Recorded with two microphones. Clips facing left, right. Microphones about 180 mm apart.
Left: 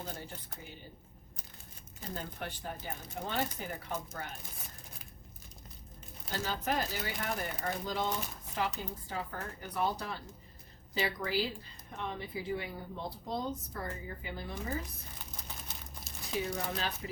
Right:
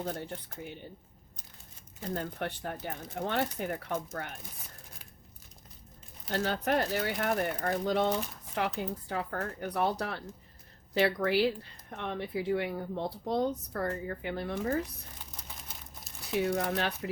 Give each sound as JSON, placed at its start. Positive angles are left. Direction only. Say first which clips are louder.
{"t": 0.0, "sound": "speech", "louder": "right 7 dB", "side_deg": -65}
{"t": 2.1, "sound": "speech", "louder": "right 6 dB", "side_deg": -65}
{"t": 6.3, "sound": "speech", "louder": "right 5 dB", "side_deg": -65}
{"t": 16.4, "sound": "speech", "louder": "right 7 dB", "side_deg": -65}